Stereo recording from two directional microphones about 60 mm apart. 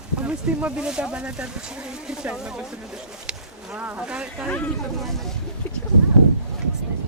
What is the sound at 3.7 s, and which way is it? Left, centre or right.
Speech, right.